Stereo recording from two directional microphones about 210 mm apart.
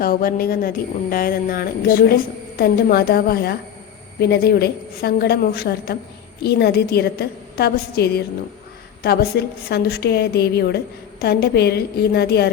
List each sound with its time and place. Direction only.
0.0 s a woman's voice: 45° left (ahead or behind)